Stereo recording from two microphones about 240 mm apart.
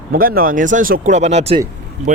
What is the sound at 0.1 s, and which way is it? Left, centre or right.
Speech, right.